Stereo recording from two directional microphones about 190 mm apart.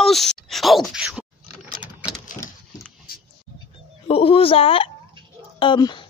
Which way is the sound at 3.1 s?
50° left (ahead or behind).